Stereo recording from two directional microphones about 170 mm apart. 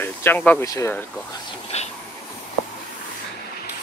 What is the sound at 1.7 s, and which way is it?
Train, 40° left (ahead or behind).